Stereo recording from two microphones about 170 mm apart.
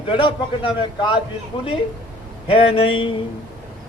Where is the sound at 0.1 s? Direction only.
30° left (ahead or behind).